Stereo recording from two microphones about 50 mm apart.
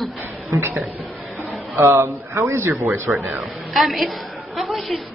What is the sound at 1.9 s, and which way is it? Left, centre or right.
A man's voice, right.